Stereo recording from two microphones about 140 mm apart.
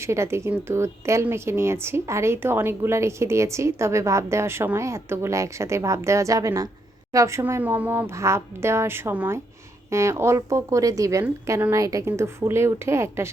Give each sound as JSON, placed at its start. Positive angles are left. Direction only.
{"t": 0.0, "sound": "speech", "side_deg": -20}